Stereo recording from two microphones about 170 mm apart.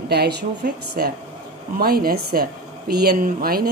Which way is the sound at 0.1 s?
80° right.